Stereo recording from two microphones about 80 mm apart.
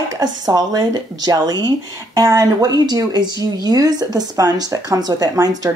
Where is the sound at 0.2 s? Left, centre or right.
Right.